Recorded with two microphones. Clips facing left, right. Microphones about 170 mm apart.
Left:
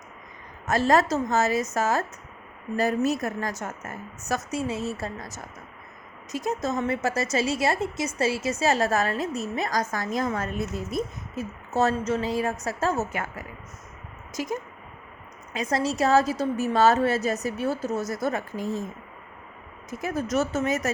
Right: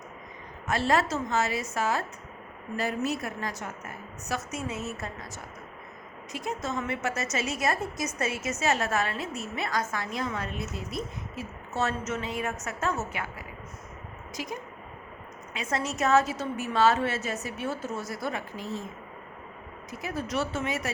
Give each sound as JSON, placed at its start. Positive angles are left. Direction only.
{"t": 0.7, "sound": "a woman's voice", "side_deg": 40}
{"t": 4.5, "sound": "a woman's voice", "side_deg": 30}
{"t": 19.9, "sound": "a woman's voice", "side_deg": 50}